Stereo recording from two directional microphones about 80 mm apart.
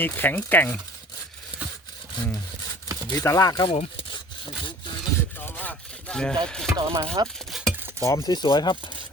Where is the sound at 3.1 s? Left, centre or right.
Left.